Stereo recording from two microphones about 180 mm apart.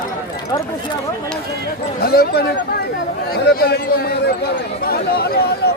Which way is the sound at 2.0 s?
60° left (ahead or behind).